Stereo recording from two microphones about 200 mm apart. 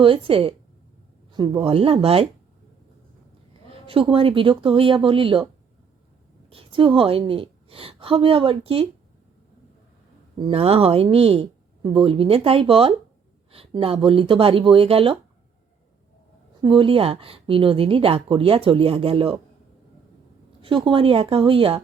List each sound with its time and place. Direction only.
0.0 s speech: 25° right (ahead or behind)
3.7 s speech: 25° right (ahead or behind)
6.5 s a woman's voice: 25° right (ahead or behind)
10.4 s speech: 30° right (ahead or behind)
16.6 s speech: 25° right (ahead or behind)
20.6 s speech: 25° right (ahead or behind)